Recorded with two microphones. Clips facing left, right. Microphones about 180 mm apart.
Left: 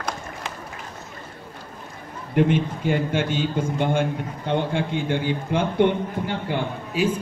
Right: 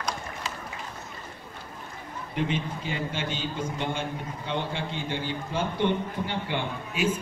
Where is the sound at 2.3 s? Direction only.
55° left (ahead or behind).